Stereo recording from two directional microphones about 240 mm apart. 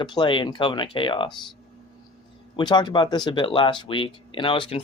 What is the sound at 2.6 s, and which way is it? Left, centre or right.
Speech, centre.